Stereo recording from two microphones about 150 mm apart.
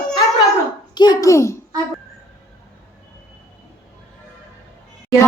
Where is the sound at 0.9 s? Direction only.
25° left (ahead or behind).